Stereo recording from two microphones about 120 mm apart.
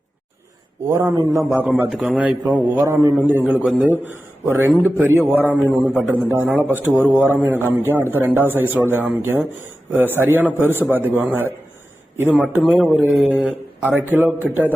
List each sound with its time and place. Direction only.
0.9 s a man's voice: 25° right (ahead or behind)
1.9 s a man's voice: 5° right (ahead or behind)
2.8 s a man's voice: 25° right (ahead or behind)
3.4 s speech: 5° right (ahead or behind)
3.8 s a man's voice: 15° right (ahead or behind)
12.6 s speech: 5° right (ahead or behind)
13.8 s a man's voice: 15° right (ahead or behind)